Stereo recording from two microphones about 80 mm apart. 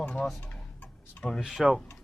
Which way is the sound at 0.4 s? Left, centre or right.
Centre.